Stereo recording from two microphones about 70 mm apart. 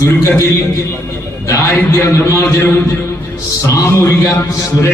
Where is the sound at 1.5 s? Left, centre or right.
Left.